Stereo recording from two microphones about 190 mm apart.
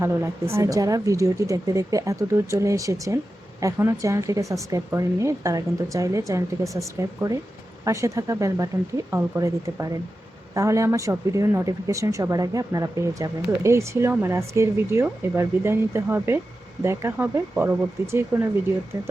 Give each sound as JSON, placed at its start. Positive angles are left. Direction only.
{"t": 0.5, "sound": "speech", "side_deg": -15}